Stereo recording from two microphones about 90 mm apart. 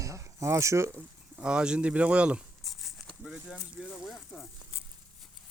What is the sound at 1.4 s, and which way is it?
Speech, 10° right (ahead or behind).